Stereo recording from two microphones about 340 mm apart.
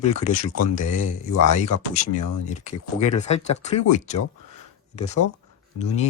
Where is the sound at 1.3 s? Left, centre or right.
Right.